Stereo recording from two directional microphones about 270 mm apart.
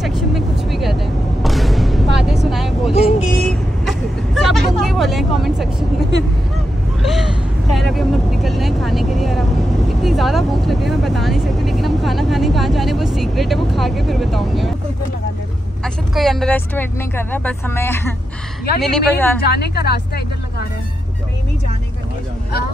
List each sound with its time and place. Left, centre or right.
0.0 s vehicle: centre
2.9 s vehicle: left
3.2 s vehicle: centre
7.0 s gasp: centre
7.7 s vehicle: centre
15.8 s speech: centre
19.4 s speech: left